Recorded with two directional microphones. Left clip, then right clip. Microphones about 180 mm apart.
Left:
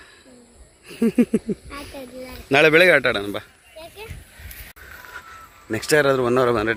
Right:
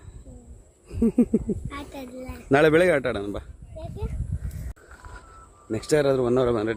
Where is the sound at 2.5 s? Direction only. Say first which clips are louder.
Left 3 dB; 25° right (ahead or behind).